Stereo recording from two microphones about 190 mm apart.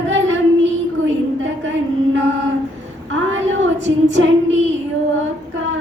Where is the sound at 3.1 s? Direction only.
90° right.